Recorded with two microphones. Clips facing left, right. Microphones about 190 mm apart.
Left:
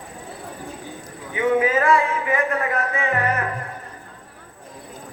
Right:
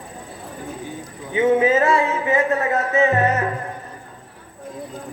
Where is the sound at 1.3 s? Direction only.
25° right (ahead or behind).